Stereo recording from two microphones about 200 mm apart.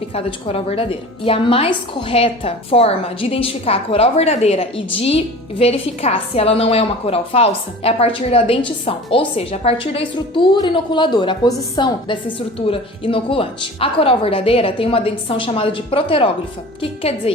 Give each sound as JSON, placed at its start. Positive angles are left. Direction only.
{"t": 0.1, "sound": "a woman's voice", "side_deg": 30}